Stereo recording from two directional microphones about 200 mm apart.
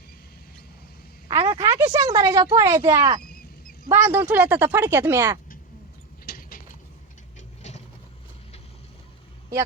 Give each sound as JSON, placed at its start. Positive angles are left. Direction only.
{"t": 1.3, "sound": "a woman's voice", "side_deg": -20}
{"t": 6.2, "sound": "a sound", "side_deg": 50}
{"t": 7.3, "sound": "vehicle", "side_deg": 35}